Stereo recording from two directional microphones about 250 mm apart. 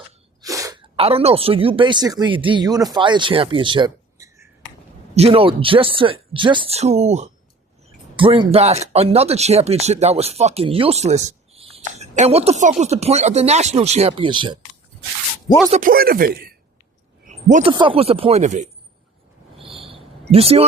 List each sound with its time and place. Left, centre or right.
0.4 s speech: centre
15.7 s speech: right
17.2 s a sound: right
17.7 s speech: centre
19.6 s a sound: right
20.3 s speech: right